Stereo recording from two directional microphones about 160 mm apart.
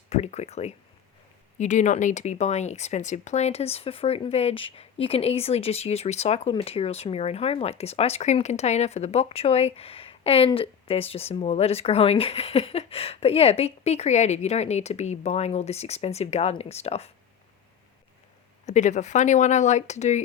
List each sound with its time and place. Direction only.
0.1 s speech: 45° left (ahead or behind)
18.6 s speech: 50° left (ahead or behind)